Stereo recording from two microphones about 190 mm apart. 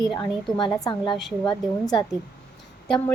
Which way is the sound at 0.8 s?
25° left (ahead or behind).